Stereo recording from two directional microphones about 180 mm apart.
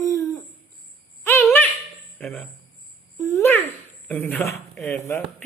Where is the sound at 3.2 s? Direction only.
15° left (ahead or behind).